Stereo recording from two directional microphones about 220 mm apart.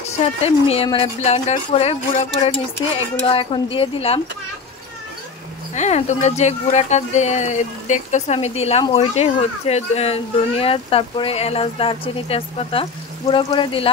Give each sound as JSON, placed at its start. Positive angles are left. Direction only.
{"t": 0.7, "sound": "speech", "side_deg": 25}
{"t": 5.8, "sound": "speech", "side_deg": 30}